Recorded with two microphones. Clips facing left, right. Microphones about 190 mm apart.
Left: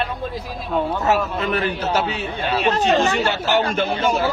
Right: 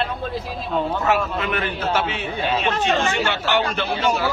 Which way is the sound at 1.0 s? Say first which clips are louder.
Left 1 dB; 40° left (ahead or behind).